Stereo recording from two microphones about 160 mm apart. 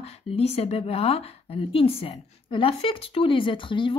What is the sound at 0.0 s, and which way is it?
Speech, 40° left (ahead or behind).